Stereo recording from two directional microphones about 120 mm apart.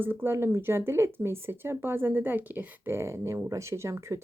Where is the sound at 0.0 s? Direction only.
15° right (ahead or behind).